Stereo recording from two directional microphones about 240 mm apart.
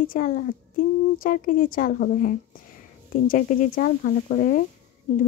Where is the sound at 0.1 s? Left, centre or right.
Left.